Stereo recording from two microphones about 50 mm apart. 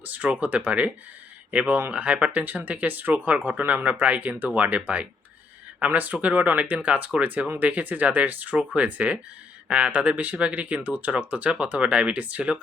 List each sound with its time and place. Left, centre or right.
0.0 s speech: right
2.3 s speech: right
3.8 s speech: right